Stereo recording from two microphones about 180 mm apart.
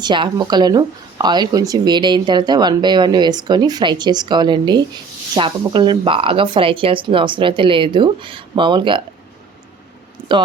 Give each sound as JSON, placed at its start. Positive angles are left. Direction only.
{"t": 0.0, "sound": "speech", "side_deg": -25}
{"t": 10.2, "sound": "speech", "side_deg": -25}